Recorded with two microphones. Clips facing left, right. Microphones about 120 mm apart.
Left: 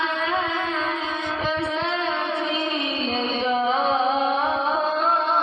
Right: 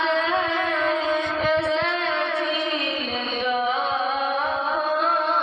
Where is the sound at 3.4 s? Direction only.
30° left (ahead or behind).